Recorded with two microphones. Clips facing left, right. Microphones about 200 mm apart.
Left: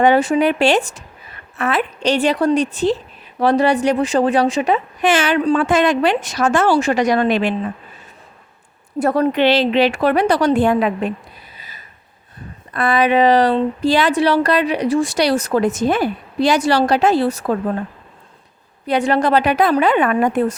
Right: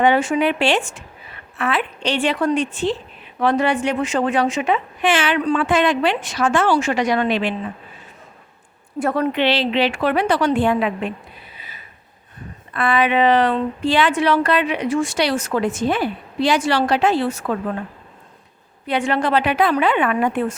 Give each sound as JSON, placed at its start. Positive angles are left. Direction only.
{"t": 0.0, "sound": "a woman's voice", "side_deg": 40}
{"t": 9.0, "sound": "a woman's voice", "side_deg": 35}
{"t": 11.5, "sound": "a sound", "side_deg": 40}
{"t": 12.7, "sound": "a woman's voice", "side_deg": 40}
{"t": 18.9, "sound": "a woman's voice", "side_deg": 40}